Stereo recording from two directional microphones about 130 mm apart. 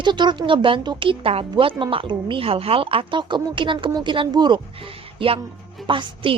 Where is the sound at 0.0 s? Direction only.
35° right (ahead or behind).